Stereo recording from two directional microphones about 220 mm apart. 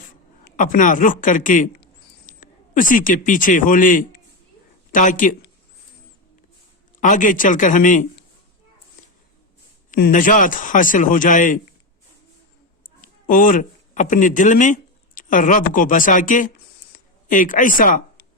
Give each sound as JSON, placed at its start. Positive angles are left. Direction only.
{"t": 0.4, "sound": "a man's voice", "side_deg": 35}
{"t": 7.0, "sound": "a man's voice", "side_deg": 35}
{"t": 9.9, "sound": "a man's voice", "side_deg": 35}
{"t": 13.0, "sound": "speech", "side_deg": 40}